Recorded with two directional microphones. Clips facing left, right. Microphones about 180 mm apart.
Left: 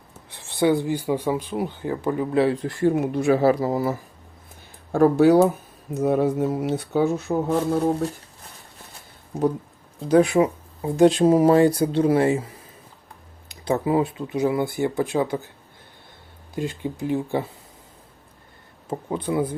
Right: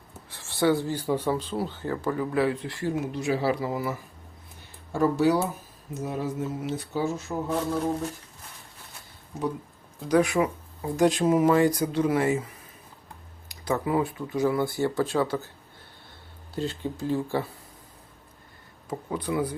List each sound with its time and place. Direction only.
0.3 s speech: 20° left (ahead or behind)
2.6 s speech: 50° left (ahead or behind)
4.9 s speech: 55° left (ahead or behind)
10.1 s speech: 30° left (ahead or behind)
13.5 s speech: 25° left (ahead or behind)
16.6 s speech: 15° left (ahead or behind)
18.9 s speech: 25° left (ahead or behind)